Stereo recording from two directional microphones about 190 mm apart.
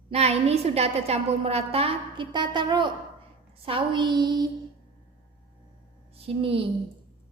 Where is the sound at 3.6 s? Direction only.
25° right (ahead or behind).